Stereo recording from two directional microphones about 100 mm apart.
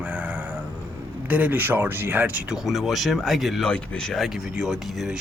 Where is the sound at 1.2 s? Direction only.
15° right (ahead or behind).